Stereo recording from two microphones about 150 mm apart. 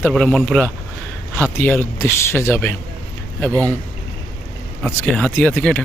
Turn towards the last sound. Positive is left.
turn(degrees=10)  # may be behind; listen again after turning